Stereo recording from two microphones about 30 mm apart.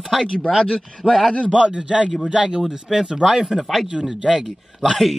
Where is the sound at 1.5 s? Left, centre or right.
Right.